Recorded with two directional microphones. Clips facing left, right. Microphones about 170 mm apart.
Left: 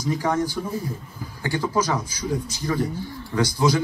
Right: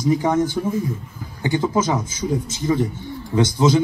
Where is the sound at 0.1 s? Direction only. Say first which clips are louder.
Right 4 dB; 20° right (ahead or behind).